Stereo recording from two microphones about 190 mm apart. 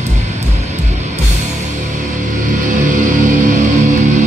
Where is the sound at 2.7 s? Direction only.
40° right (ahead or behind).